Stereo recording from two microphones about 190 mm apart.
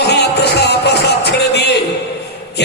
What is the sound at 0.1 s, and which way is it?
Music, 60° left (ahead or behind).